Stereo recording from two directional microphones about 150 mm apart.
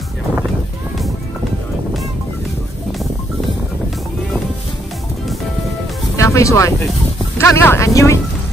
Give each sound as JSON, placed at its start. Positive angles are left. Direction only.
{"t": 6.1, "sound": "music", "side_deg": 20}
{"t": 7.3, "sound": "speech", "side_deg": 15}